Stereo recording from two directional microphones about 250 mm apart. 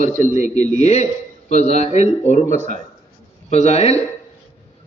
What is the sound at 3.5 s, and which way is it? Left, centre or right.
Speech, left.